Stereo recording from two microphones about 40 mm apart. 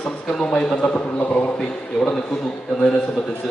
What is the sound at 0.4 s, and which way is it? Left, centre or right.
Speech, left.